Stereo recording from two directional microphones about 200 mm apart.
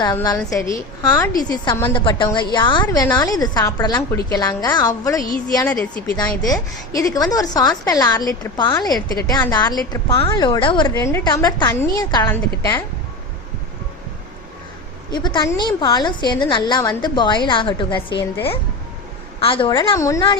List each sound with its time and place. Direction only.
0.0 s a woman's voice: 20° left (ahead or behind)
15.1 s a woman's voice: 20° left (ahead or behind)
19.4 s a woman's voice: 25° left (ahead or behind)